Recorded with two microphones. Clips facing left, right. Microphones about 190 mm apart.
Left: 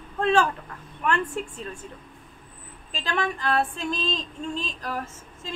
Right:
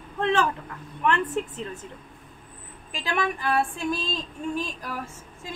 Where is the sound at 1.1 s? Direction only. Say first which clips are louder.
Right 2 dB; 20° right (ahead or behind).